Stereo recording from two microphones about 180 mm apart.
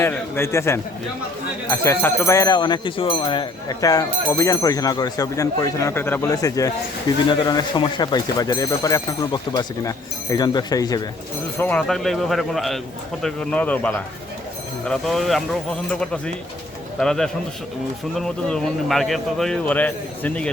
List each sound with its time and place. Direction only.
0.0 s a man's voice: 15° left (ahead or behind)
11.5 s a man's voice: 10° left (ahead or behind)
18.4 s a man's voice: 5° left (ahead or behind)